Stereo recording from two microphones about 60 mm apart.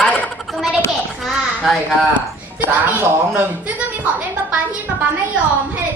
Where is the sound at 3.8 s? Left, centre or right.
Right.